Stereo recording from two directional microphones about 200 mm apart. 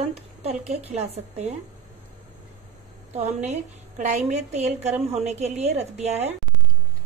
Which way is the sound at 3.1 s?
35° right (ahead or behind).